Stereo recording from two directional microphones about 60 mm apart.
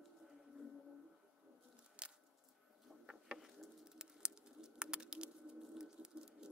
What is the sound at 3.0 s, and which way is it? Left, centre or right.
Insect, centre.